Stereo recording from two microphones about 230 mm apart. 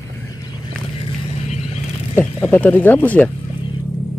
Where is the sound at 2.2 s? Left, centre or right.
Centre.